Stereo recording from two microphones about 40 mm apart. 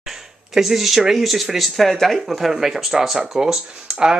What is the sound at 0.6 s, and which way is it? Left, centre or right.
Speech, centre.